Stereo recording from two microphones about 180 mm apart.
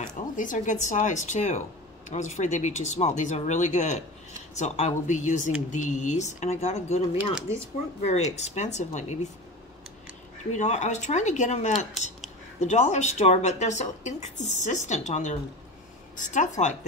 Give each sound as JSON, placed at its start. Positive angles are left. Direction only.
{"t": 0.0, "sound": "a woman's voice", "side_deg": 45}
{"t": 10.5, "sound": "a woman's voice", "side_deg": 40}